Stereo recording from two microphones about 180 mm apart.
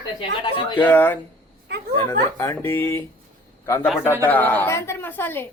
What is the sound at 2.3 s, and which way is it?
A woman's voice, 15° left (ahead or behind).